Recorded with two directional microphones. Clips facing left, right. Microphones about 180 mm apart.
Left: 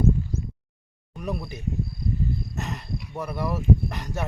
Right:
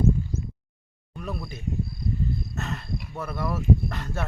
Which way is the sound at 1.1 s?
15° left (ahead or behind).